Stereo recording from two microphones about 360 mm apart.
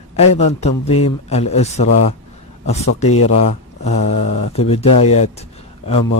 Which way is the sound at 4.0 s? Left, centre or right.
Left.